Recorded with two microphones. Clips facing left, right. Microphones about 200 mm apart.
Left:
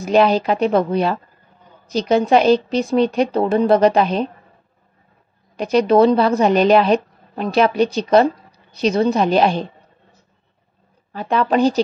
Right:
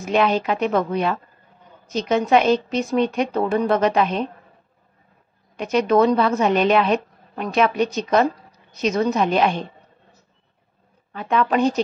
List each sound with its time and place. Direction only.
0.0 s a woman's voice: 35° left (ahead or behind)
5.6 s a woman's voice: 35° left (ahead or behind)
11.1 s a woman's voice: 35° left (ahead or behind)